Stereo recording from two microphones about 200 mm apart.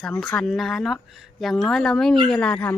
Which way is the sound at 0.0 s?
Centre (ahead or behind).